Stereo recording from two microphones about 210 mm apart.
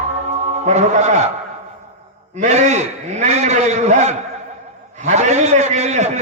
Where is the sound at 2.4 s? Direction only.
35° right (ahead or behind).